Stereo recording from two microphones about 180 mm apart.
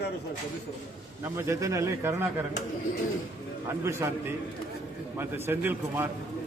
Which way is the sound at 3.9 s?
15° right (ahead or behind).